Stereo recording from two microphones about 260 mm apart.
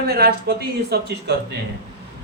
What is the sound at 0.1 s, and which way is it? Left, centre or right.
Speech, right.